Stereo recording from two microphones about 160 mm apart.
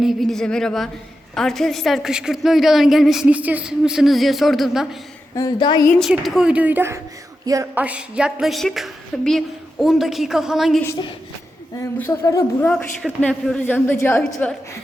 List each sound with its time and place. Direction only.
0.0 s a woman's voice: centre (ahead or behind)
5.3 s speech: 25° left (ahead or behind)
6.0 s a woman's voice: centre (ahead or behind); by 7.7 s 20° right (ahead or behind)
7.8 s a woman's voice: 10° right (ahead or behind)
11.8 s speech: 15° left (ahead or behind)
12.6 s a woman's voice: 5° left (ahead or behind)